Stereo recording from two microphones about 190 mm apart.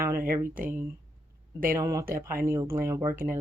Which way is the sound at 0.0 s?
15° right (ahead or behind).